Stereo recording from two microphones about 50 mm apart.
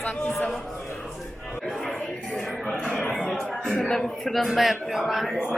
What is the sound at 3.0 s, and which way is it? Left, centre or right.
Chatter, centre.